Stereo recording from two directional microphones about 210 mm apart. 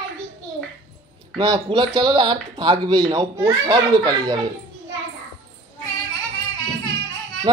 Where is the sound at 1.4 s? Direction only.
20° right (ahead or behind).